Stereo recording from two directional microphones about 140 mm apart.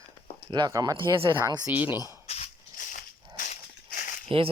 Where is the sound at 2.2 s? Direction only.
50° left (ahead or behind).